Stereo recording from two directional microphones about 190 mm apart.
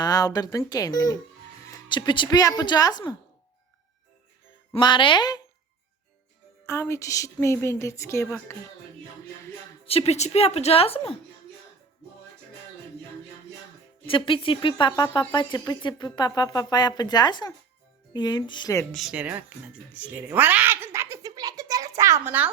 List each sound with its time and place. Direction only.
0.0 s speech: 20° left (ahead or behind)
4.7 s speech: 25° left (ahead or behind)
6.7 s speech: 15° left (ahead or behind)
9.8 s speech: 30° left (ahead or behind)
14.3 s speech: 25° left (ahead or behind)
18.9 s speech: 5° right (ahead or behind)
20.1 s a sound: 10° right (ahead or behind)